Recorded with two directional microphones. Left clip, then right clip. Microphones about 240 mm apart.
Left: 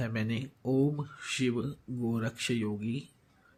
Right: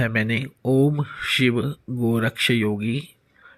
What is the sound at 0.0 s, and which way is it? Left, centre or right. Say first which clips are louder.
Speech: right 13 dB; centre.